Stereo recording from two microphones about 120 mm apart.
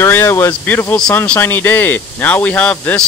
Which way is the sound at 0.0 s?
20° left (ahead or behind).